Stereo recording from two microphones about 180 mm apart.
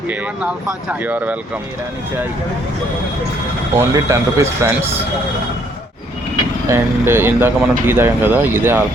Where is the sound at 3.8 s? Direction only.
15° right (ahead or behind).